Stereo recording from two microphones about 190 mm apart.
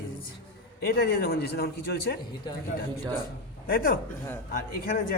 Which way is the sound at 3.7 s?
50° left (ahead or behind).